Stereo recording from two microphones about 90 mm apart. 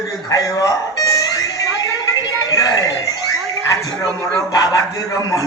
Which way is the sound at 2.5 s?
40° left (ahead or behind).